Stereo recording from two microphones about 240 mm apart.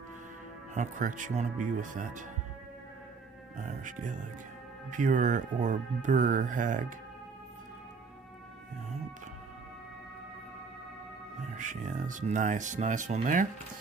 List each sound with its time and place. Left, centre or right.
0.7 s speech: right
3.6 s speech: right
11.5 s speech: right